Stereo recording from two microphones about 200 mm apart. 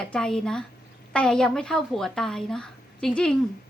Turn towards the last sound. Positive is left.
turn(degrees=5)  # may be behind; listen again after turning